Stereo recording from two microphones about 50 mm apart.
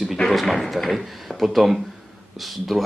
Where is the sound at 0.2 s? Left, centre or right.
Centre.